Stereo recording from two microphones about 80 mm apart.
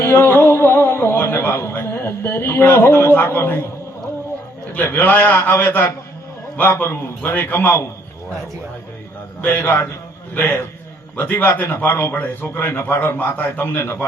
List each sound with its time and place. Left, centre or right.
0.0 s a sound: left
4.7 s a man's voice: left
9.4 s a man's voice: left